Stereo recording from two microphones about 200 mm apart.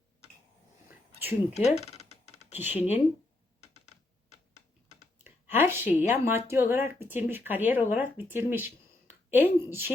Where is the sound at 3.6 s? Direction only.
35° left (ahead or behind).